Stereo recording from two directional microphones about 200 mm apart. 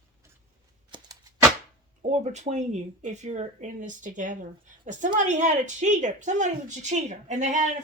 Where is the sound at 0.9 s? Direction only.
25° right (ahead or behind).